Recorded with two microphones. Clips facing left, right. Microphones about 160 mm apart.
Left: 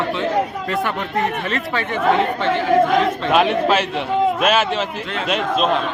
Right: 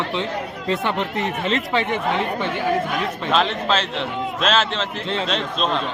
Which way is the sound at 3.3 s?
10° left (ahead or behind).